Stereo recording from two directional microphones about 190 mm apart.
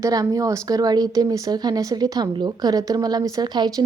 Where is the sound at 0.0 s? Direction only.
20° right (ahead or behind).